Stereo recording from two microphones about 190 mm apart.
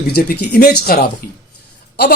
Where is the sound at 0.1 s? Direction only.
55° left (ahead or behind).